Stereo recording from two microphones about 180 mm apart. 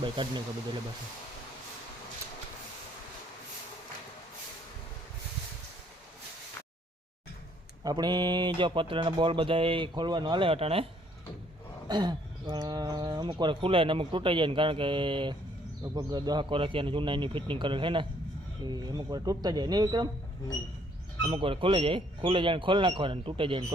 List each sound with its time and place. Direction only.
0.0 s speech: 25° right (ahead or behind)
7.9 s speech: 25° right (ahead or behind)
11.9 s speech: 25° right (ahead or behind)
21.2 s speech: 30° right (ahead or behind)